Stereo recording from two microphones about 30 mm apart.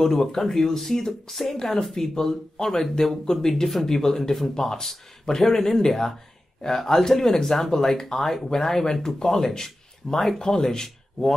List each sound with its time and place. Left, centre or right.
0.0 s speech: centre
1.6 s speech: centre